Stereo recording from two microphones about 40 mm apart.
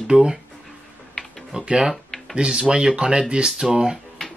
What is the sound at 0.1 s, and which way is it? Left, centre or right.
Speech, centre.